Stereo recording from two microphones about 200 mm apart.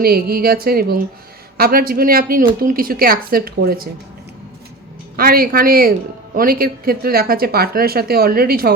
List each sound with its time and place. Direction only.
0.0 s speech: 50° right (ahead or behind)
5.1 s speech: 45° right (ahead or behind)